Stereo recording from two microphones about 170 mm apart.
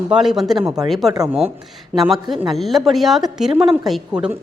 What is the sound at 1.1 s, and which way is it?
Speech, 20° right (ahead or behind).